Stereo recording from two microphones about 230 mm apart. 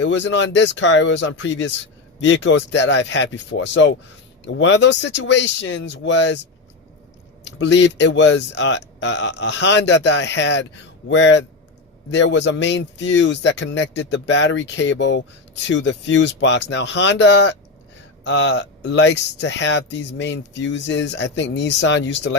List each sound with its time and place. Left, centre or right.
0.0 s speech: left